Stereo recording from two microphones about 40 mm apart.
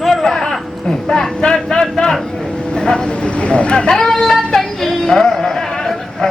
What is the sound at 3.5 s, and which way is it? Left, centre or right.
Speech, left.